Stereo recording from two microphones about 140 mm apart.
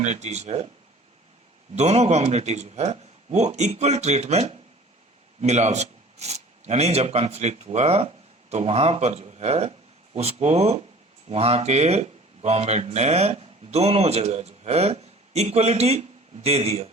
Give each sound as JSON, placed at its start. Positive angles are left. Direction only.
{"t": 0.0, "sound": "a man's voice", "side_deg": -55}
{"t": 1.7, "sound": "a man's voice", "side_deg": -50}